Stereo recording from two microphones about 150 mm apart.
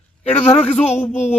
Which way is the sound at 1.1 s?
50° left (ahead or behind).